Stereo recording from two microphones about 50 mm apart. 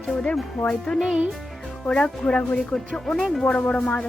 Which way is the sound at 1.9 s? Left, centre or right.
Centre.